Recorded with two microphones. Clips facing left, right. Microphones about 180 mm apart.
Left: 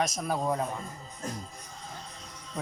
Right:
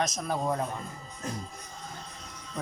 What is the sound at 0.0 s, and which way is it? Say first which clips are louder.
Speech: even; 5° left (ahead or behind).